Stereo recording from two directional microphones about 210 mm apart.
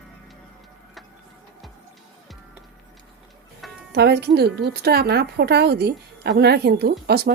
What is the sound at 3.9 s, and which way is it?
A woman's voice, 50° right (ahead or behind).